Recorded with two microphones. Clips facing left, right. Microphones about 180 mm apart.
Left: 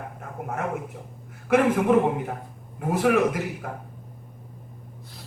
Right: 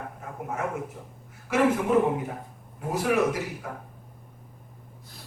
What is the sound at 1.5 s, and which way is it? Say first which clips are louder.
Speech: left 4 dB; 55° left (ahead or behind).